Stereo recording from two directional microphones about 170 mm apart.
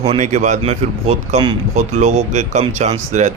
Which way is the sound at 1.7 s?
45° right (ahead or behind).